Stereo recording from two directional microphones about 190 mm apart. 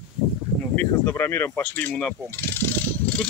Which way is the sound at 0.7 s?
10° left (ahead or behind).